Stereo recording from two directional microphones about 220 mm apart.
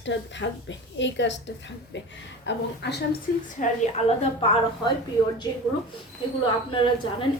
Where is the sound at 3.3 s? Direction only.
40° left (ahead or behind).